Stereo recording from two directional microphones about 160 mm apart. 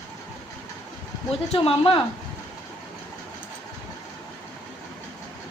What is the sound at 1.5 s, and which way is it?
Speech, 35° left (ahead or behind).